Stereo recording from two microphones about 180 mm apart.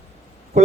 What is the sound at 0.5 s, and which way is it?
Speech, 40° right (ahead or behind).